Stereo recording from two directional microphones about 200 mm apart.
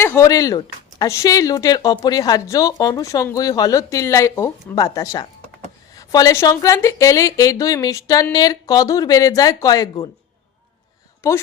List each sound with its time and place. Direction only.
0.0 s speech: 15° left (ahead or behind)
11.2 s a woman's voice: 15° left (ahead or behind)